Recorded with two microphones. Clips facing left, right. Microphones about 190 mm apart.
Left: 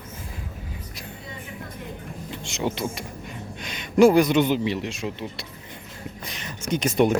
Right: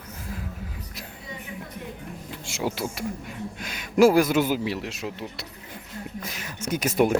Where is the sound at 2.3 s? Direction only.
5° right (ahead or behind).